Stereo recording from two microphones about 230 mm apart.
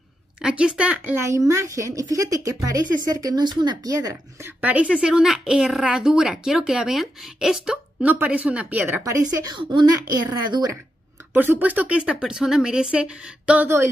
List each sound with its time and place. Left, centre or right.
0.4 s a woman's voice: centre